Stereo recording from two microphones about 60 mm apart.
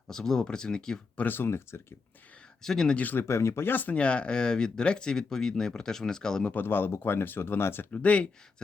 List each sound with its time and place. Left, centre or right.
0.1 s speech: centre
1.2 s speech: left
2.6 s speech: centre
2.9 s speech: left
3.2 s speech: left
3.7 s speech: left
3.9 s speech: centre
6.5 s speech: left
7.9 s speech: left